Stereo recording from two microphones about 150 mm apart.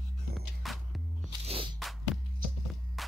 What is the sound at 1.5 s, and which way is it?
Music, 35° right (ahead or behind).